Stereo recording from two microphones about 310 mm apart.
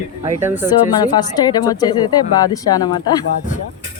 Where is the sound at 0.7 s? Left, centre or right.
Centre.